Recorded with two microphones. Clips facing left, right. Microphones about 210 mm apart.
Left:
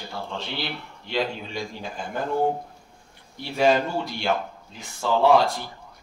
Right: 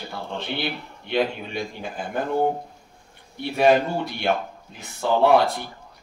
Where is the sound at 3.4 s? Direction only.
55° right (ahead or behind).